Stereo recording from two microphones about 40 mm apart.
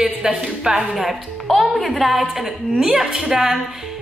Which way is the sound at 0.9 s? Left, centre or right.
Centre.